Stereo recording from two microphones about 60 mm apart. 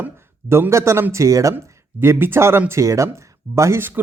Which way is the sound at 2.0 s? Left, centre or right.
Right.